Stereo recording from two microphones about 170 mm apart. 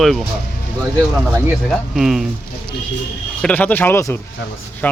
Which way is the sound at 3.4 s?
10° left (ahead or behind).